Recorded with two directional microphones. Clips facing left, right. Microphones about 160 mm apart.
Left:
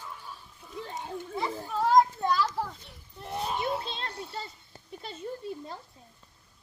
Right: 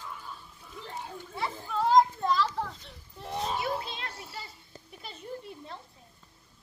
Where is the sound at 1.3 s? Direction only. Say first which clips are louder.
Left 1 dB; centre (ahead or behind).